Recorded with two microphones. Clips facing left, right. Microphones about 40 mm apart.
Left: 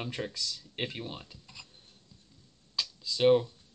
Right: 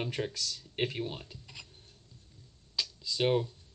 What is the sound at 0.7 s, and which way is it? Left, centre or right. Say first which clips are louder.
Speech: right 5 dB; centre.